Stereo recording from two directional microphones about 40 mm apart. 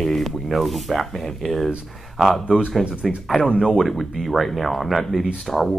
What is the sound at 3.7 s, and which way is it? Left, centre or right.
Speech, centre.